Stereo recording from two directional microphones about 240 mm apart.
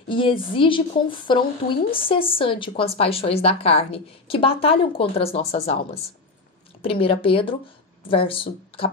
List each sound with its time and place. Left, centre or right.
0.1 s a woman's voice: left